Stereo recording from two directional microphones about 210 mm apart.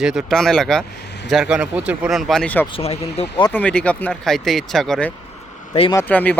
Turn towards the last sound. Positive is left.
turn(degrees=5)  # may be behind; listen again after turning